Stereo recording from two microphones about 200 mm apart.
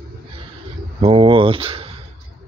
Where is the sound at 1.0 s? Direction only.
25° right (ahead or behind).